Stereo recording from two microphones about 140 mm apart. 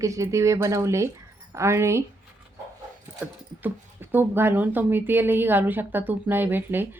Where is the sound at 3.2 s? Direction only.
15° right (ahead or behind).